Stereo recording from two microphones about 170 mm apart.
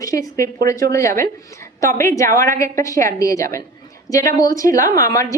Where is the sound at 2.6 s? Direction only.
20° left (ahead or behind).